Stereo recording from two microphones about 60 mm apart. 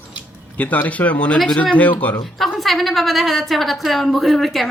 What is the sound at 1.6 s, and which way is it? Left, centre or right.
Speech, left.